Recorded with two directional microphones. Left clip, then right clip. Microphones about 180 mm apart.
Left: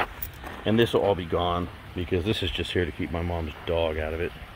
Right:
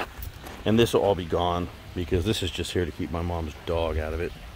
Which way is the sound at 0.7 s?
20° right (ahead or behind).